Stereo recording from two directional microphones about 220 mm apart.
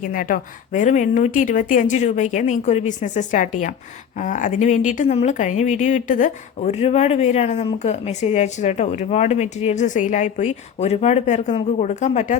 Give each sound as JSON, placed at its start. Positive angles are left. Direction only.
{"t": 0.0, "sound": "speech", "side_deg": 40}